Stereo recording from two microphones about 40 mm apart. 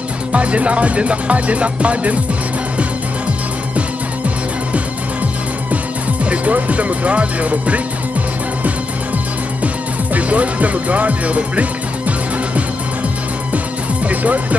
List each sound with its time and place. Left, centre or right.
0.3 s speech: right
6.2 s speech: right
10.1 s speech: right
14.0 s music: right